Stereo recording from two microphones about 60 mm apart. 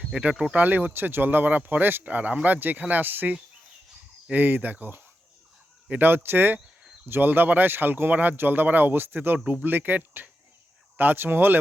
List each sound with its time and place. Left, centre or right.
0.1 s speech: centre
0.5 s speech: right